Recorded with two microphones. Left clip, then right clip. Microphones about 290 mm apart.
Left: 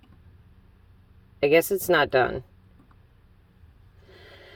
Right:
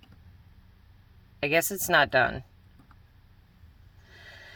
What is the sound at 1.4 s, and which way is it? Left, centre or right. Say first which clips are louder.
Speech: left 6 dB; centre.